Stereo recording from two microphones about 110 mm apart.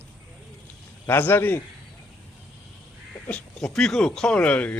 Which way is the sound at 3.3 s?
10° left (ahead or behind).